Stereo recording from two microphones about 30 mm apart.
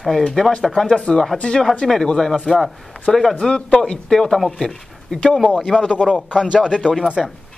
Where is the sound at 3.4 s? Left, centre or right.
Left.